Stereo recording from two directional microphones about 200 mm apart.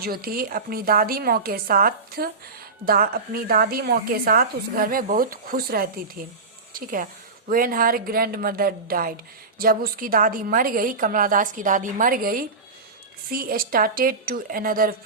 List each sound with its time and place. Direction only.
0.0 s a woman's voice: 50° right (ahead or behind)